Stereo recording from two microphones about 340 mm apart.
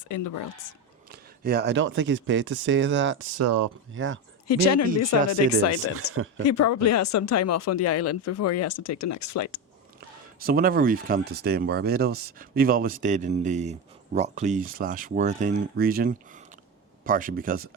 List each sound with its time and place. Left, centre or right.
0.1 s speech: left
1.5 s speech: right
4.4 s speech: left
10.4 s speech: right